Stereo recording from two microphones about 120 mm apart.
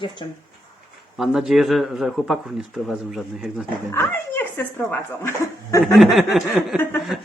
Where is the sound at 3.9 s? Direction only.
20° left (ahead or behind).